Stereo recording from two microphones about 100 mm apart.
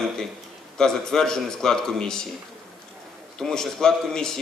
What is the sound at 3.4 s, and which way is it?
A man's voice, 5° left (ahead or behind).